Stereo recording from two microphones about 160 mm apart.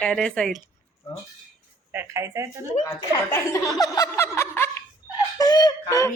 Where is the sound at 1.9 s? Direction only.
15° right (ahead or behind).